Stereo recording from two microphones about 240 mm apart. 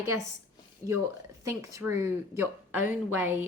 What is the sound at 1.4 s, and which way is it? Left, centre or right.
A woman's voice, centre.